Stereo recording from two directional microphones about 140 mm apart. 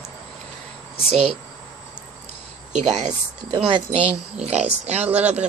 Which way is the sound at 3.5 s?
35° right (ahead or behind).